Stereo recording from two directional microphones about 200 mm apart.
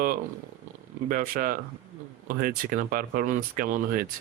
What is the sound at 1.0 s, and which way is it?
Speech, 45° right (ahead or behind).